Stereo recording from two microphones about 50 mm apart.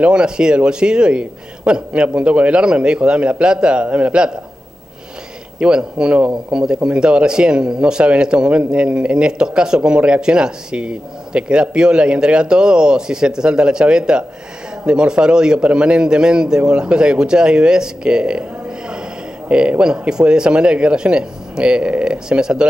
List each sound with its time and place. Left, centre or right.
0.0 s a man's voice: centre
5.6 s a man's voice: centre